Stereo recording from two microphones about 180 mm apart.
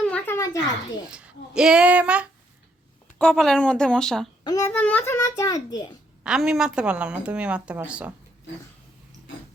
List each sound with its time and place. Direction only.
0.0 s a sound: 5° left (ahead or behind)
1.0 s a woman's voice: 5° right (ahead or behind)
3.2 s speech: 5° left (ahead or behind)
4.4 s a child's voice: 15° left (ahead or behind)
6.2 s a woman's voice: 5° right (ahead or behind)